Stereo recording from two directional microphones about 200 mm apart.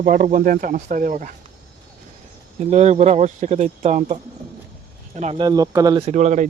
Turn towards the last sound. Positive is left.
turn(degrees=-35)  # may be behind; listen again after turning